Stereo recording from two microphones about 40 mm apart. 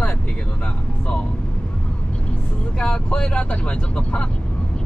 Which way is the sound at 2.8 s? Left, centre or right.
Left.